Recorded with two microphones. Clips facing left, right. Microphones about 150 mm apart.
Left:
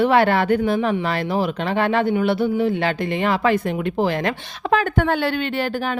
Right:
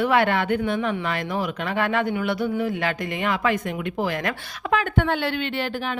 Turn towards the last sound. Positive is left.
turn(degrees=40)  # may be behind; listen again after turning